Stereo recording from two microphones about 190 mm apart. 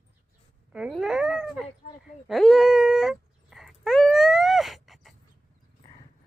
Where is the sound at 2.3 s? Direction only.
Centre (ahead or behind).